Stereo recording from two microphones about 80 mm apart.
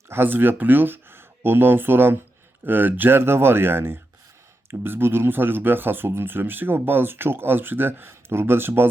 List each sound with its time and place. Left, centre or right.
0.1 s speech: right